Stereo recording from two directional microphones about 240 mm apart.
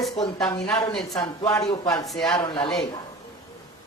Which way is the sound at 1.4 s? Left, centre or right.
Centre.